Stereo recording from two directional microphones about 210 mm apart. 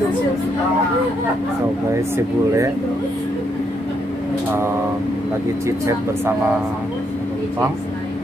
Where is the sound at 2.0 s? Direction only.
15° right (ahead or behind).